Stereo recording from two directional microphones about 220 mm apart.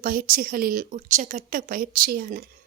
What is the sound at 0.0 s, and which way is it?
A woman's voice, 40° right (ahead or behind).